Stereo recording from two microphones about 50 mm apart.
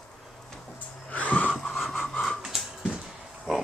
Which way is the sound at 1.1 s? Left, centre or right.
Left.